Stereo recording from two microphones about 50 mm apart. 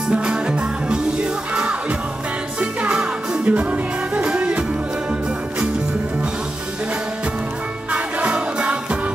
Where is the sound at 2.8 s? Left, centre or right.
Right.